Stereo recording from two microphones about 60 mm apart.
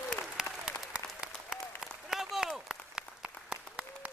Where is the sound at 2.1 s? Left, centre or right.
Centre.